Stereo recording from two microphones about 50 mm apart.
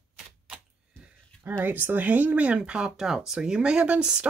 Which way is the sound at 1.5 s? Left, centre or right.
Right.